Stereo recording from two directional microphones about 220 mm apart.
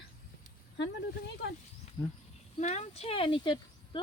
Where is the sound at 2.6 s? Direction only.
30° left (ahead or behind).